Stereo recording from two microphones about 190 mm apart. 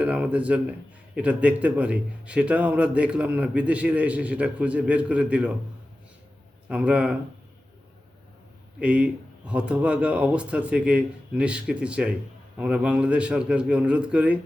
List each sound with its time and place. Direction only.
0.0 s a man's voice: 5° right (ahead or behind)
6.7 s a man's voice: 5° right (ahead or behind)
8.8 s a man's voice: 5° right (ahead or behind)